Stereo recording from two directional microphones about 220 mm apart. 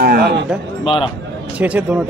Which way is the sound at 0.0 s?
45° right (ahead or behind).